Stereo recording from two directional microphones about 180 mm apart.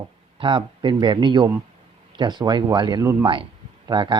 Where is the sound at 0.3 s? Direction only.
25° right (ahead or behind).